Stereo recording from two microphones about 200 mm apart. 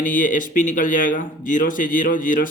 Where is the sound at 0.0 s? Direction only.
40° left (ahead or behind).